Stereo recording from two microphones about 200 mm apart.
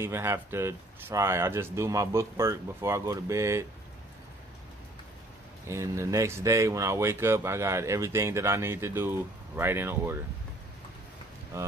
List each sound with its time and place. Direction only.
0.0 s speech: 10° right (ahead or behind)
5.7 s speech: 15° right (ahead or behind)
11.5 s speech: 15° right (ahead or behind)